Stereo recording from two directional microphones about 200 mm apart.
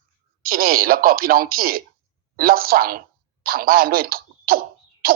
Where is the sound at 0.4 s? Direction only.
45° right (ahead or behind).